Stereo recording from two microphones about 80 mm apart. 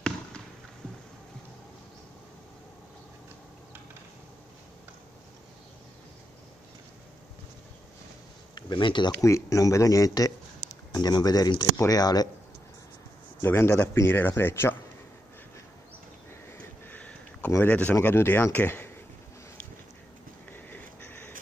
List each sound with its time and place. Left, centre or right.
8.5 s speech: left
9.2 s speech: left
10.9 s speech: left
13.4 s speech: left
16.5 s a sound: left
17.6 s speech: centre
20.5 s a sound: left